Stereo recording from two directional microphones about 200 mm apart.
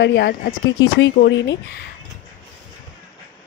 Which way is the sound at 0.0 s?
60° left (ahead or behind).